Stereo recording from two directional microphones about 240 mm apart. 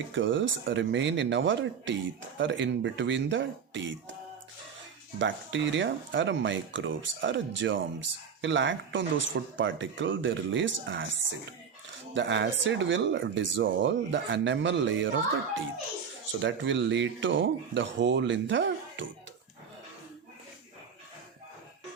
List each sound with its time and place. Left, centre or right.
0.1 s speech: right
5.2 s speech: right
12.1 s speech: right